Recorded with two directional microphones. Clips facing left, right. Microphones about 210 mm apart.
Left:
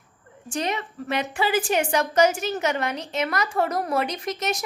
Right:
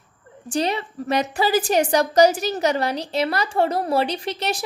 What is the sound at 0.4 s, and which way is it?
A woman's voice, 35° right (ahead or behind).